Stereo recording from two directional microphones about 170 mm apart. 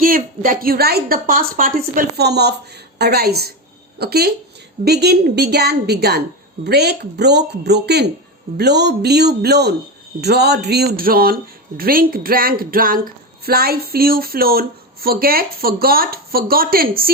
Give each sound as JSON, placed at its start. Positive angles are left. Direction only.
{"t": 0.0, "sound": "a woman's voice", "side_deg": -55}